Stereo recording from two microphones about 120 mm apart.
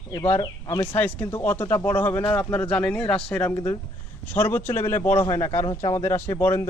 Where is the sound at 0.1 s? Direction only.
25° left (ahead or behind).